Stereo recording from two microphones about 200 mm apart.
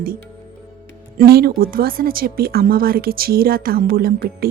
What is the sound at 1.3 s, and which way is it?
A woman's voice, 50° right (ahead or behind).